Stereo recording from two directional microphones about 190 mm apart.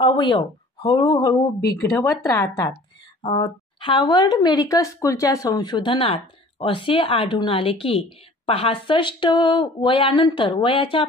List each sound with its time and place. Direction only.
0.0 s speech: 25° left (ahead or behind)
3.3 s speech: 30° left (ahead or behind)